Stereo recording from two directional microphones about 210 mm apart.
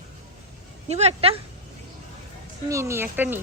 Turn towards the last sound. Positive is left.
turn(degrees=-10)  # may be behind; listen again after turning